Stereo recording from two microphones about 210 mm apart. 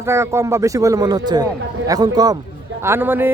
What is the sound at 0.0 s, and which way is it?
A man's voice, 15° right (ahead or behind).